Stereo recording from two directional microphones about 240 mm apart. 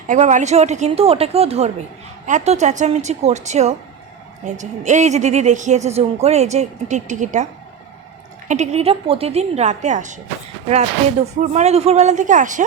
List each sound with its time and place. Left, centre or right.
0.1 s speech: right
8.4 s speech: right